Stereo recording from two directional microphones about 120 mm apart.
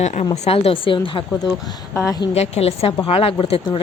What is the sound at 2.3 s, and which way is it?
A woman's voice, 60° left (ahead or behind).